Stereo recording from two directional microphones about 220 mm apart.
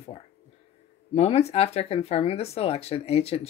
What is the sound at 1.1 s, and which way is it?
Speech, 30° left (ahead or behind).